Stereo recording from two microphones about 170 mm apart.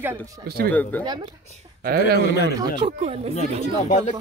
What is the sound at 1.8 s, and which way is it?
Speech, 70° right (ahead or behind).